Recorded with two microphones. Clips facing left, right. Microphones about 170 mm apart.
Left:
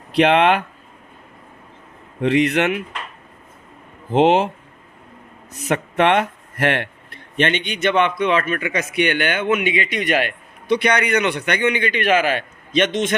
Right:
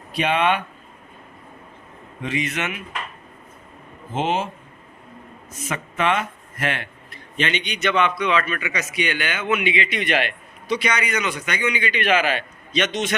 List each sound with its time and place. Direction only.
0.1 s speech: 75° left (ahead or behind)
2.2 s a man's voice: 65° left (ahead or behind)
4.1 s speech: 75° left (ahead or behind)
5.5 s a man's voice: 65° left (ahead or behind)